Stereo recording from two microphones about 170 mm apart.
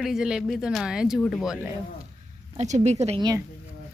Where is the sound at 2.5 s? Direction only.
40° right (ahead or behind).